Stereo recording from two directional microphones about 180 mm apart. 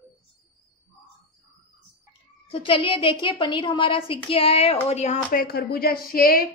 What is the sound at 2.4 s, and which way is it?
A woman's voice, 30° left (ahead or behind).